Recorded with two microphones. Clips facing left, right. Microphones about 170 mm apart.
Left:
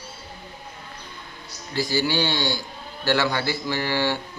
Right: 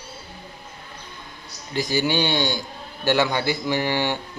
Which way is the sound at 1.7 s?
20° right (ahead or behind).